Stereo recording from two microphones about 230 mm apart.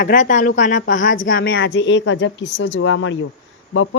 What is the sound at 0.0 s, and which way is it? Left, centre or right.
A woman's voice, left.